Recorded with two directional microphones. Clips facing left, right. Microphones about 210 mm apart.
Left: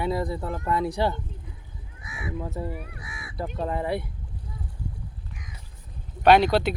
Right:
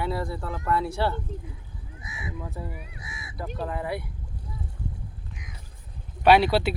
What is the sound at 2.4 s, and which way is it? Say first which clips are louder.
Speech: left 5 dB; 30° left (ahead or behind).